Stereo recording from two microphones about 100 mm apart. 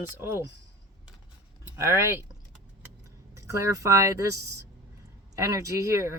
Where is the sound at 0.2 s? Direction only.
25° right (ahead or behind).